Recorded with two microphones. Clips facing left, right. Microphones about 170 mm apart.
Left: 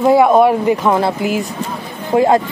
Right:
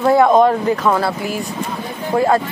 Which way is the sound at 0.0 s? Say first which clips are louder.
Left 2 dB; 10° left (ahead or behind).